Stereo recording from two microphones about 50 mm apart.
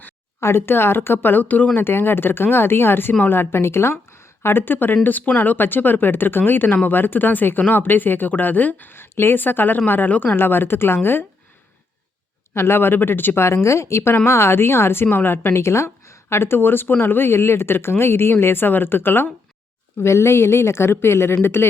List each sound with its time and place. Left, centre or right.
0.3 s speech: left
1.8 s a woman's voice: left
5.0 s speech: left
5.4 s speech: left
8.9 s speech: left
12.5 s speech: left
13.4 s speech: left
15.6 s speech: left
20.0 s speech: left